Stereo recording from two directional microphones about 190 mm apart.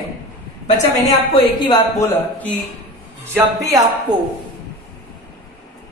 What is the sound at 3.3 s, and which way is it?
Speech, 15° right (ahead or behind).